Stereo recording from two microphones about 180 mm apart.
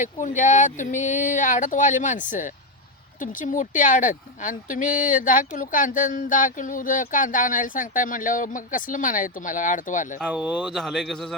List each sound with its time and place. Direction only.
0.0 s speech: 45° left (ahead or behind)
10.2 s speech: 5° right (ahead or behind)